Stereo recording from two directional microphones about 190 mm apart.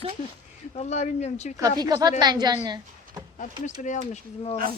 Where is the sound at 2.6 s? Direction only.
20° right (ahead or behind).